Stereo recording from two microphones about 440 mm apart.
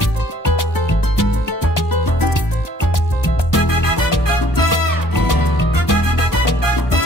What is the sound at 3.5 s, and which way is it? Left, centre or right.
Music, left.